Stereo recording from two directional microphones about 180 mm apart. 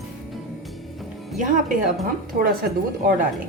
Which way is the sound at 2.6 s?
60° right (ahead or behind).